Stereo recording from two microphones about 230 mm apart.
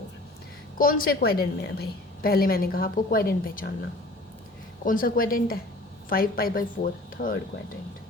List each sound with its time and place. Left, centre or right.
0.8 s a woman's voice: left
4.9 s a woman's voice: left